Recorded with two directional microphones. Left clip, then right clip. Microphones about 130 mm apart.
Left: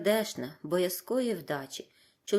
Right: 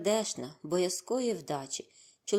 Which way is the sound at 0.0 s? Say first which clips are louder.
Left 2 dB; 10° right (ahead or behind).